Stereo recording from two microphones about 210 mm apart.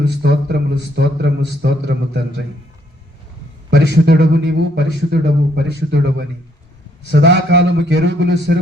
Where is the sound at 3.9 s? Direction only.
50° right (ahead or behind).